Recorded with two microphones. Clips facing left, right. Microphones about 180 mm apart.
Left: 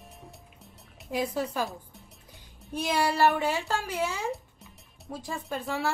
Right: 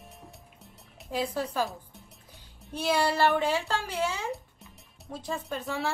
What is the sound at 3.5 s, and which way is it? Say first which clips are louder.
Speech: even; 10° left (ahead or behind).